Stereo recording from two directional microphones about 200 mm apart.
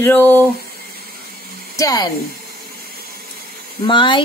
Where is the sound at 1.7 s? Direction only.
15° left (ahead or behind).